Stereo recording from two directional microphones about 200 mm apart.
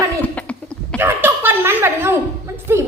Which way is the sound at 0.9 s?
10° right (ahead or behind).